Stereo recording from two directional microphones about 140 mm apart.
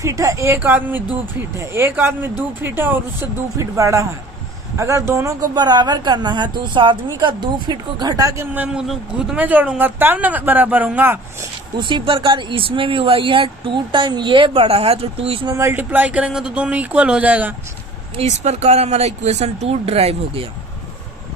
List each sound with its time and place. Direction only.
0.0 s speech: 25° right (ahead or behind)
8.5 s speech: 5° right (ahead or behind)
11.8 s speech: 35° right (ahead or behind)
15.4 s speech: 20° right (ahead or behind)
18.2 s speech: 50° right (ahead or behind)